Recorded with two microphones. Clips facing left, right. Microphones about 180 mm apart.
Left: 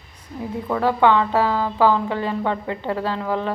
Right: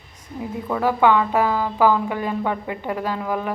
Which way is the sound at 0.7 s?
10° right (ahead or behind).